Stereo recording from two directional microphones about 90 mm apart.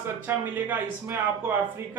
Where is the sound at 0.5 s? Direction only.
20° right (ahead or behind).